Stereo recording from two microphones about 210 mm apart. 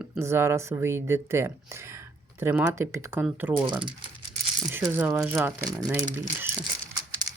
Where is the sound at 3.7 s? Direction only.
20° right (ahead or behind).